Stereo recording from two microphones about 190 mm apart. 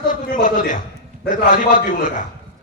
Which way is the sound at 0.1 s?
40° left (ahead or behind).